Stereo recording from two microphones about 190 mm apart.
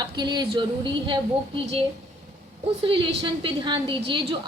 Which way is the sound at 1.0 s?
25° right (ahead or behind).